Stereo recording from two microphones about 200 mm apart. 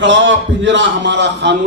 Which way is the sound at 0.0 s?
65° right (ahead or behind).